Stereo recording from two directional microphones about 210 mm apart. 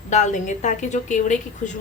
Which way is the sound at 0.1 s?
35° left (ahead or behind).